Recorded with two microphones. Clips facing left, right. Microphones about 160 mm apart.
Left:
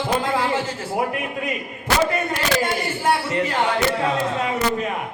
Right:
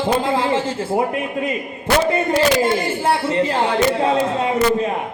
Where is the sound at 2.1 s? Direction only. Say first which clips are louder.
Right 7 dB; 30° right (ahead or behind).